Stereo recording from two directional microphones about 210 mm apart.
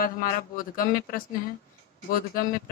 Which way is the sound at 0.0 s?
45° left (ahead or behind).